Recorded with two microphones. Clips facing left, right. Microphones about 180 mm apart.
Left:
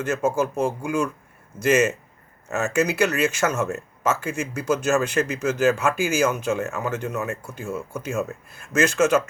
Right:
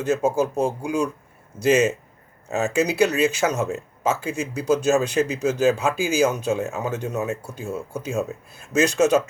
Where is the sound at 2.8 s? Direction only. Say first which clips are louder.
Right 2 dB; 15° right (ahead or behind).